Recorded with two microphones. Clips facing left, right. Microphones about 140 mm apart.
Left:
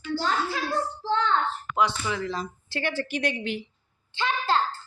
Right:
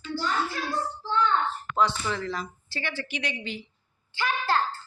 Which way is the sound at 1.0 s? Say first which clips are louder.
Even; 90° left.